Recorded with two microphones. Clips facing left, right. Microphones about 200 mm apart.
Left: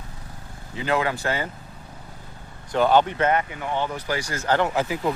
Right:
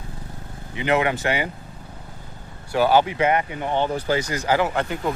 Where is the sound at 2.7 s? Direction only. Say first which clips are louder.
Right 1 dB; 5° right (ahead or behind).